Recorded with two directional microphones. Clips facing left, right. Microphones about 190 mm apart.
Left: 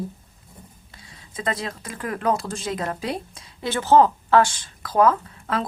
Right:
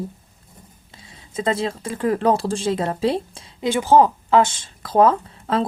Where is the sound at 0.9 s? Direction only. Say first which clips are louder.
Right 7 dB; 25° right (ahead or behind).